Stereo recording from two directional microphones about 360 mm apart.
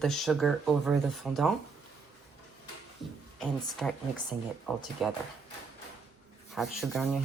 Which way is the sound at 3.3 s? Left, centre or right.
Centre.